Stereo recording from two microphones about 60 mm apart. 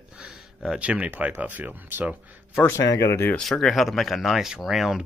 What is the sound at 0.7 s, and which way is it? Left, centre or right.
Speech, right.